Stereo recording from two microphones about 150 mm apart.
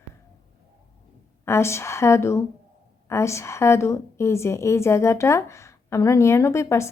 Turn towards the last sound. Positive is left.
turn(degrees=20)  # may be behind; listen again after turning